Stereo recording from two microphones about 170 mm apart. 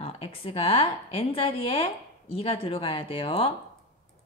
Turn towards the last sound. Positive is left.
turn(degrees=30)  # may be behind; listen again after turning